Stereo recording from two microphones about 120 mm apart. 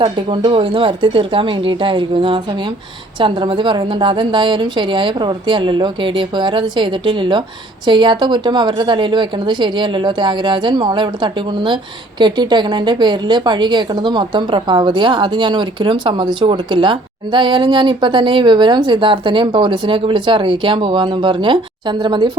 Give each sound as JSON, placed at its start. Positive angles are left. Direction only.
{"t": 0.0, "sound": "a woman's voice", "side_deg": -40}